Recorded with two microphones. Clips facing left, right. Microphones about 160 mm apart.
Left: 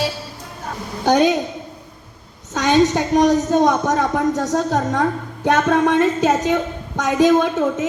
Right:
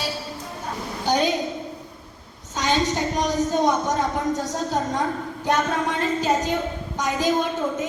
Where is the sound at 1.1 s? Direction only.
55° left (ahead or behind).